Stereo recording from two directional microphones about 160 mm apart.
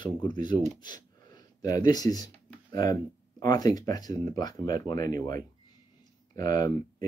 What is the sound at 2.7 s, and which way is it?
Speech, 25° left (ahead or behind).